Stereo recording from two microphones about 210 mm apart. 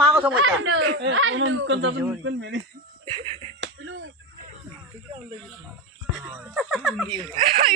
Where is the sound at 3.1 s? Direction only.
25° right (ahead or behind).